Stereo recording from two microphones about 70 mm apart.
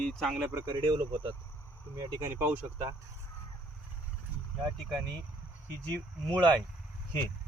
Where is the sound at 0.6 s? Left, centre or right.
Right.